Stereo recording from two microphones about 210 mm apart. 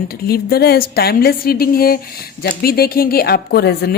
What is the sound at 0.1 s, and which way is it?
Speech, 45° left (ahead or behind).